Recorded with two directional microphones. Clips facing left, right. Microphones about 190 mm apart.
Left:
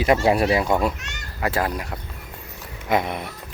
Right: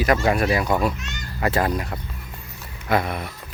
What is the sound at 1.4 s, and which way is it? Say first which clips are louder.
Speech: right 2 dB; 5° left (ahead or behind).